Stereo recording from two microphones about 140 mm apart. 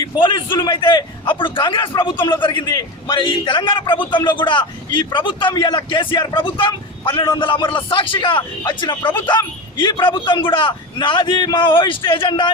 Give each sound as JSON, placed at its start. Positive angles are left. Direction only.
{"t": 0.0, "sound": "a man's voice", "side_deg": 35}